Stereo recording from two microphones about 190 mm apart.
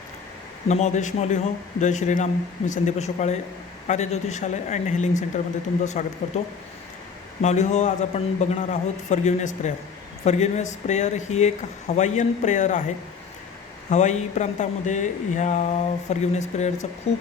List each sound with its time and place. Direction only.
0.7 s speech: 40° left (ahead or behind)
7.4 s speech: 40° left (ahead or behind)
13.9 s speech: 40° left (ahead or behind)